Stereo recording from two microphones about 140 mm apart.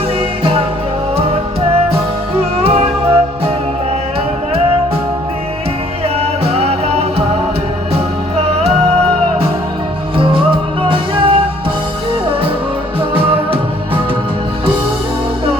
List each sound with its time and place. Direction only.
2.4 s music: 45° right (ahead or behind)
6.1 s music: 45° right (ahead or behind)
10.8 s music: 40° right (ahead or behind)
13.0 s music: 40° right (ahead or behind)